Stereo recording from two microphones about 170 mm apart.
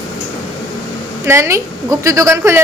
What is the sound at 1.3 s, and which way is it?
A woman's voice, 15° right (ahead or behind).